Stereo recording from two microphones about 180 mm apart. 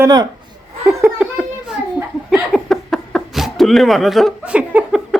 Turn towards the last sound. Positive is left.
turn(degrees=-5)  # may be behind; listen again after turning